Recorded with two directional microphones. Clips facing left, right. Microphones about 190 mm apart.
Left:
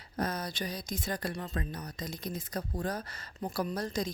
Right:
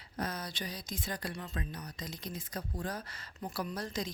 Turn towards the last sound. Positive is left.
turn(degrees=40)  # may be behind; listen again after turning